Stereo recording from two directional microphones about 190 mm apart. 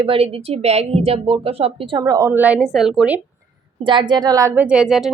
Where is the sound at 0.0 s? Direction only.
30° right (ahead or behind); by 3.2 s 5° right (ahead or behind).